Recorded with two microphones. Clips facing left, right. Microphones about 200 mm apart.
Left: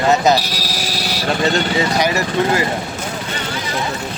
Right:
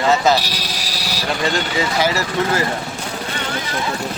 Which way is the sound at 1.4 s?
20° left (ahead or behind).